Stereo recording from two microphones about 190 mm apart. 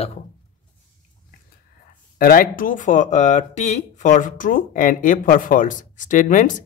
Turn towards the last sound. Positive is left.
turn(degrees=45)  # may be behind; listen again after turning